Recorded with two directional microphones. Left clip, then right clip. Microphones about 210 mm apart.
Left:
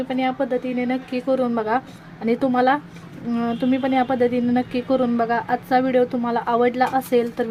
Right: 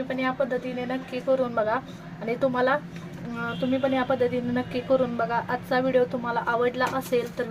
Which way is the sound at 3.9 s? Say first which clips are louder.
Left 5 dB; 30° left (ahead or behind).